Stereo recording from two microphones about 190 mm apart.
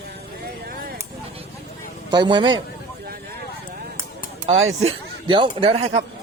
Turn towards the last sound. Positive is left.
turn(degrees=-35)  # may be behind; listen again after turning